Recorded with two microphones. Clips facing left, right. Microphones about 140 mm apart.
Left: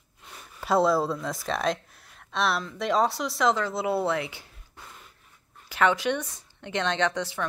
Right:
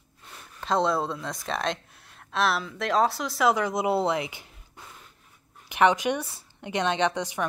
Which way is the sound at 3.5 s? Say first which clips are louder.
Right 2 dB; 15° right (ahead or behind).